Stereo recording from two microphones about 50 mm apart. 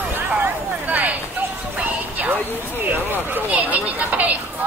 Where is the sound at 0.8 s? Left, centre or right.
Right.